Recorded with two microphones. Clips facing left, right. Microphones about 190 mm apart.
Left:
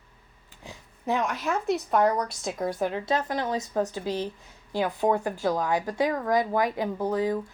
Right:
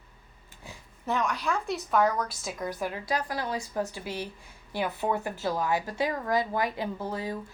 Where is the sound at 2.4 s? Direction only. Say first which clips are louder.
Left 5 dB; 25° left (ahead or behind).